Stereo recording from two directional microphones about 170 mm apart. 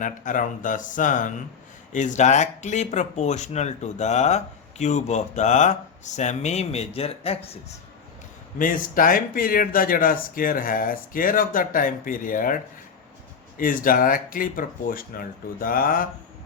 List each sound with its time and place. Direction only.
0.0 s speech: 50° left (ahead or behind)
8.5 s speech: 50° left (ahead or behind)
13.6 s speech: 55° left (ahead or behind)